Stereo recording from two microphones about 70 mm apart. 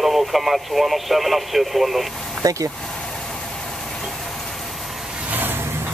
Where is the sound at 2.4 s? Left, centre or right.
Right.